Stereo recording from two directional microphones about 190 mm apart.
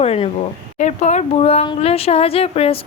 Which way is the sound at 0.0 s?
30° left (ahead or behind).